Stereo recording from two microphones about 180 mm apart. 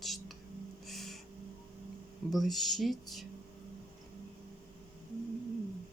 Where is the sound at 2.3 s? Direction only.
Centre (ahead or behind).